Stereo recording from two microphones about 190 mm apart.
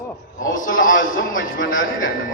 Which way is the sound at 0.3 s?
45° left (ahead or behind).